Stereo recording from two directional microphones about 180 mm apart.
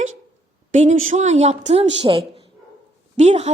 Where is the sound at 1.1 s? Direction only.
40° right (ahead or behind).